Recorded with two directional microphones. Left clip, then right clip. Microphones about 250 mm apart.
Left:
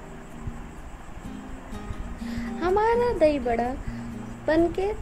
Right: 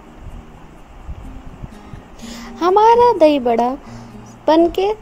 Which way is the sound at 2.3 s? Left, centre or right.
Right.